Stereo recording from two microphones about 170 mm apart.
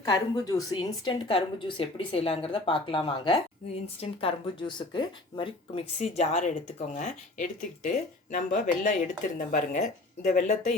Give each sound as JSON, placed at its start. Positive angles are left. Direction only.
{"t": 0.0, "sound": "a woman's voice", "side_deg": 20}